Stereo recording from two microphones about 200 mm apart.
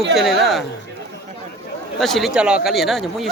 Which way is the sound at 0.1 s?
Centre (ahead or behind).